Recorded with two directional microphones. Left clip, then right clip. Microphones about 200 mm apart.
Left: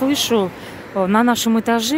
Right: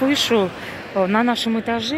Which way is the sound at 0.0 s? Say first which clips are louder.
Even; 15° left (ahead or behind).